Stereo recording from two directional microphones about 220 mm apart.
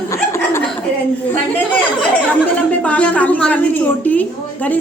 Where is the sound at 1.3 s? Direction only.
5° left (ahead or behind).